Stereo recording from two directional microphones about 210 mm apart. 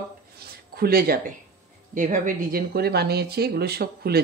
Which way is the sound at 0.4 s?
50° right (ahead or behind).